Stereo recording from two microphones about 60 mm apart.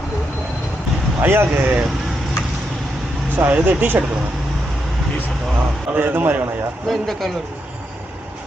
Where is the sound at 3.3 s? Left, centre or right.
Right.